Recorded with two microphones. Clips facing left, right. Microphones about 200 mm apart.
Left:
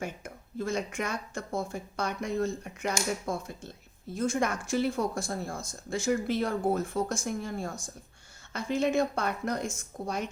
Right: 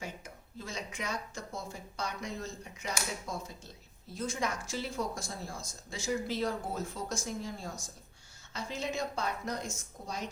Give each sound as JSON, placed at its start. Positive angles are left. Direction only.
{"t": 0.6, "sound": "speech", "side_deg": 50}